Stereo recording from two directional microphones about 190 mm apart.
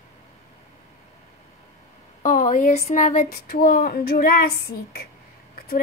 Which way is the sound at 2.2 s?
45° left (ahead or behind).